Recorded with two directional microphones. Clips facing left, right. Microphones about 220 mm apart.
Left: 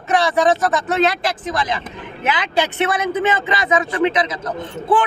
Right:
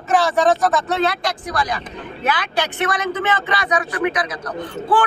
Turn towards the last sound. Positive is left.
turn(degrees=25)  # may be behind; listen again after turning